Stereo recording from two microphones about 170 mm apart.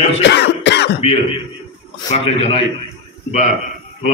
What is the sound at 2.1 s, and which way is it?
Speech, 40° left (ahead or behind).